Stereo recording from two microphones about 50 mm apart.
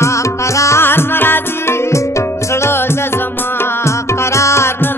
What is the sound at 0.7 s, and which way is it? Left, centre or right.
Music, left.